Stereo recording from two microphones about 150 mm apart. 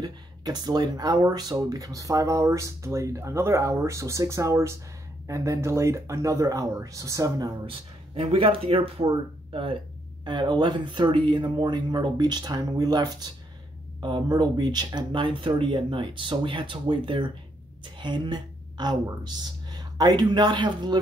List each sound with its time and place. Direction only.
0.0 s speech: 25° right (ahead or behind)
8.1 s speech: 40° right (ahead or behind)